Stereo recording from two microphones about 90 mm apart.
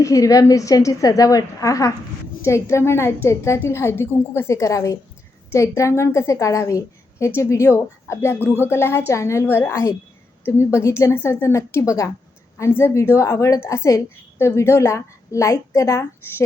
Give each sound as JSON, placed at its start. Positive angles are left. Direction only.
{"t": 0.0, "sound": "a woman's voice", "side_deg": 40}